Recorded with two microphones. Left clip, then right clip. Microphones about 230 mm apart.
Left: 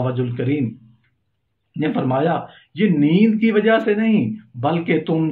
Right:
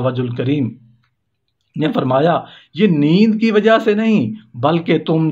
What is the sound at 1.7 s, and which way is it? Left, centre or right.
A man's voice, right.